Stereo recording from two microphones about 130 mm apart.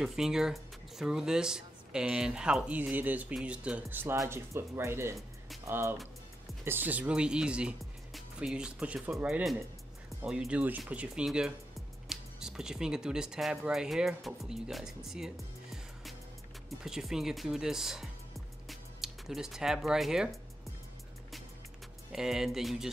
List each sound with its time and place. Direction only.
0.0 s speech: 5° right (ahead or behind)
16.6 s speech: centre (ahead or behind)
22.1 s speech: 5° right (ahead or behind)